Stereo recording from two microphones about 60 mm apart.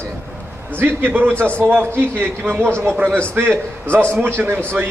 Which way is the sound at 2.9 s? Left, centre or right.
Right.